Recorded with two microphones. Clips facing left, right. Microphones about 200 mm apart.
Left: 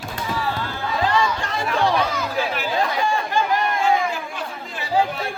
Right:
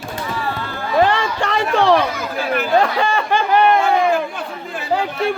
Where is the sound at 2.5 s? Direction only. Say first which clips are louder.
Right 7 dB; 55° right (ahead or behind).